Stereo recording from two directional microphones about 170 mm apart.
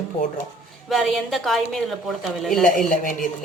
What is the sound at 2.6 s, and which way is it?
Speech, 50° left (ahead or behind).